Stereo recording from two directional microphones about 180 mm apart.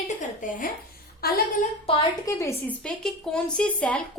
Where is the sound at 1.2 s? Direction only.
60° left (ahead or behind).